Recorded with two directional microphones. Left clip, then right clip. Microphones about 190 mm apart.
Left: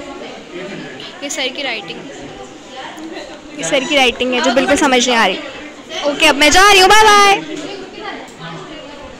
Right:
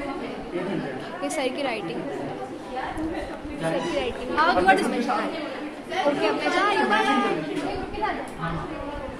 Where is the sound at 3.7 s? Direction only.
40° left (ahead or behind).